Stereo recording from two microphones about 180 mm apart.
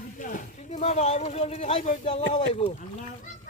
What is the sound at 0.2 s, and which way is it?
Speech, 45° left (ahead or behind).